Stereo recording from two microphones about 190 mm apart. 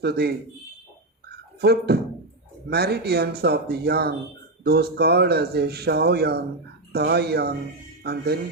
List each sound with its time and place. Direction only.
0.0 s a man's voice: 60° right (ahead or behind)
1.6 s a man's voice: 55° right (ahead or behind)